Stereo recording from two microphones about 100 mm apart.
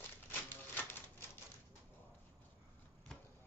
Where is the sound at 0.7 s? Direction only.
20° left (ahead or behind).